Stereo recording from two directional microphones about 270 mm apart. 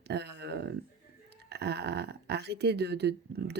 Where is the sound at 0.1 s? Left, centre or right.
Right.